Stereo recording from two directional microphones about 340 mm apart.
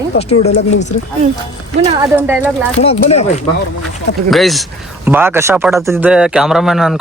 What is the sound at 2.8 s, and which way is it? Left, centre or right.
Speech, centre.